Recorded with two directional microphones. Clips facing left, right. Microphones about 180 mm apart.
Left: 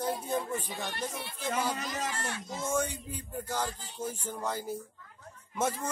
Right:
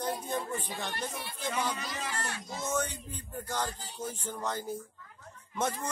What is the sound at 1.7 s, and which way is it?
Speech, 40° left (ahead or behind).